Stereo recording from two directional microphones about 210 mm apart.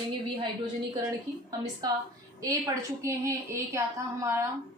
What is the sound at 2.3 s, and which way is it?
A woman's voice, 15° right (ahead or behind).